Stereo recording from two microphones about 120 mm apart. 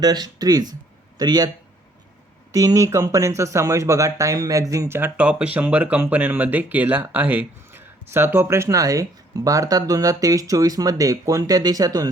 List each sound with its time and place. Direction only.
0.0 s speech: 35° right (ahead or behind)
2.5 s speech: 30° right (ahead or behind)